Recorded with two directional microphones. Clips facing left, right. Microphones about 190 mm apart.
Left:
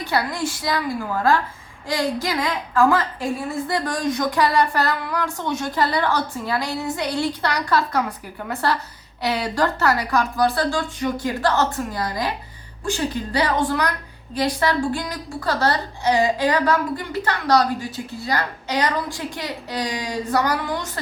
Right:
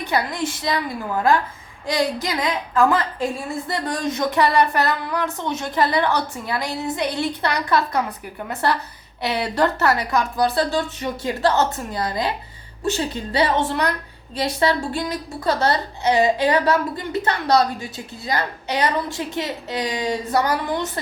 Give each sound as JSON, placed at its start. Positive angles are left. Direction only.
{"t": 0.0, "sound": "a woman's voice", "side_deg": -20}
{"t": 1.9, "sound": "a woman's voice", "side_deg": -20}
{"t": 9.2, "sound": "a woman's voice", "side_deg": -20}